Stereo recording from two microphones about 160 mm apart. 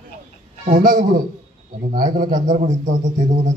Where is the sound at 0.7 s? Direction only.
55° right (ahead or behind).